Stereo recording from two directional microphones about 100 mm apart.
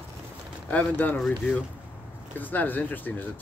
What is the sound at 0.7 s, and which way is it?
Speech, 15° left (ahead or behind).